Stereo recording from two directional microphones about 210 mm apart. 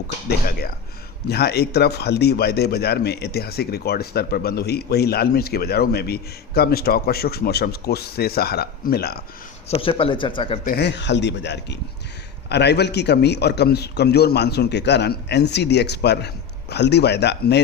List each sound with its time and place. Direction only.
1.3 s speech: 50° left (ahead or behind)
9.6 s speech: 25° left (ahead or behind)
10.7 s speech: 50° left (ahead or behind)